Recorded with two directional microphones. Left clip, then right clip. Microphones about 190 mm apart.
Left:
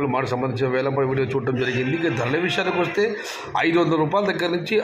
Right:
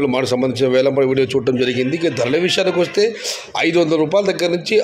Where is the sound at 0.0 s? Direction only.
45° right (ahead or behind).